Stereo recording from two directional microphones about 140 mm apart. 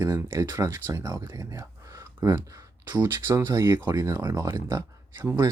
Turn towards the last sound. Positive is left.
turn(degrees=-20)  # may be behind; listen again after turning